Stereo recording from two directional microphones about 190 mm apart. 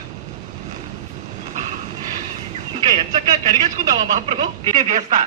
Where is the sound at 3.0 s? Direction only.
40° right (ahead or behind).